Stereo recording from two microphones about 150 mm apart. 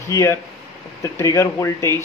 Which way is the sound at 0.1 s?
20° left (ahead or behind).